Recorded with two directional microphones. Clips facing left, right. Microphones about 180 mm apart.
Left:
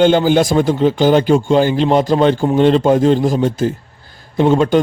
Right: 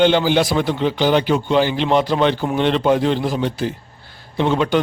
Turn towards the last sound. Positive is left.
turn(degrees=45)  # may be behind; listen again after turning